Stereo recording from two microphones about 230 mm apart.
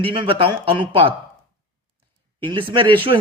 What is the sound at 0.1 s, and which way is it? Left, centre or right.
Speech, right.